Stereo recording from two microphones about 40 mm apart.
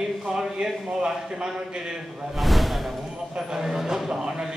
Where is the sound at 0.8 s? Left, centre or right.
Right.